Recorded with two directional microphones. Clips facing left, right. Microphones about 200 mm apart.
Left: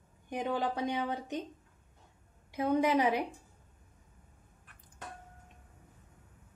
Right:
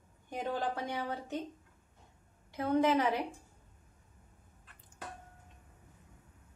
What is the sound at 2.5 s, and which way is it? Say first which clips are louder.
Speech: left 1 dB; 15° left (ahead or behind).